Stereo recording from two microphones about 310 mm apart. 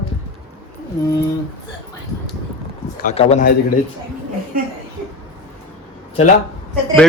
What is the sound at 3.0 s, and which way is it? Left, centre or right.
Speech, left.